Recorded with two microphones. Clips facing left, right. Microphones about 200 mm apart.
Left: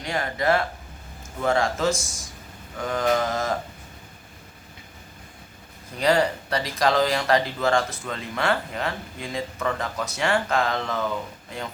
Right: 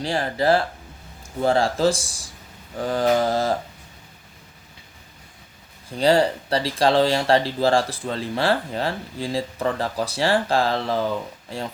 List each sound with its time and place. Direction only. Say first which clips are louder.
0.0 s speech: right 4 dB; 30° right (ahead or behind)
6.0 s speech: right 3 dB; 30° right (ahead or behind)